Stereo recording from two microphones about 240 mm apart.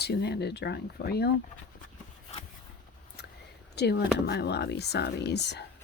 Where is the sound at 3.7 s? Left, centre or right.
Left.